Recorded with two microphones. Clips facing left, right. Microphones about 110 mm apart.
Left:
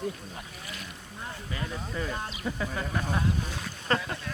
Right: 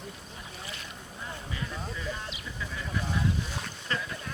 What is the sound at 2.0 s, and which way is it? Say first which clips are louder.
Speech: left 4 dB; 50° left (ahead or behind).